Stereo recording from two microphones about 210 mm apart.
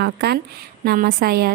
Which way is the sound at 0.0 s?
50° right (ahead or behind).